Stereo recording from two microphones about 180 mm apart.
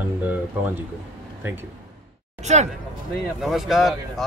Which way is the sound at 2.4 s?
40° right (ahead or behind).